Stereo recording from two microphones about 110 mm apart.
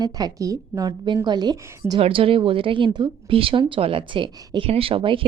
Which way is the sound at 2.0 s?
55° right (ahead or behind).